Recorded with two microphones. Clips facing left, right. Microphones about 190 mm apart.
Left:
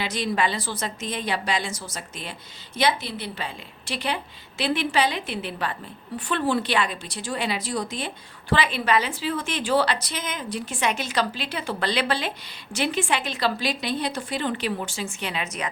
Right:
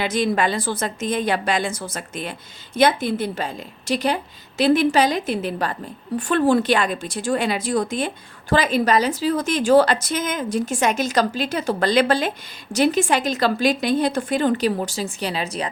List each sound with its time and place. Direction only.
0.0 s a woman's voice: 50° right (ahead or behind); by 15.7 s 35° right (ahead or behind)